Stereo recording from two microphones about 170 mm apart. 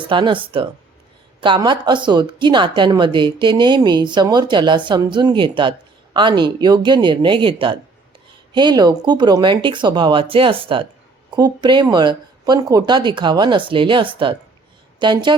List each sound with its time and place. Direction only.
0.0 s a woman's voice: 30° right (ahead or behind)